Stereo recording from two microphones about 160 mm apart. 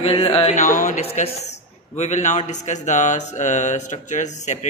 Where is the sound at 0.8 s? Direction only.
50° left (ahead or behind).